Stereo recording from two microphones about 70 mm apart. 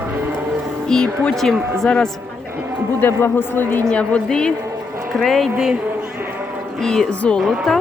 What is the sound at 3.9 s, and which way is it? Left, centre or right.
Speech, centre.